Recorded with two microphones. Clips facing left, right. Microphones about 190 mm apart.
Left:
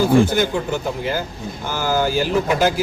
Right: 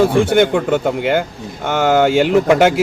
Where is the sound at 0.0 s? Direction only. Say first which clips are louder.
Right 3 dB; 70° right (ahead or behind).